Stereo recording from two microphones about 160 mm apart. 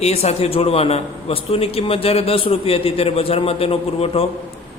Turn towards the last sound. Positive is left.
turn(degrees=35)  # may be behind; listen again after turning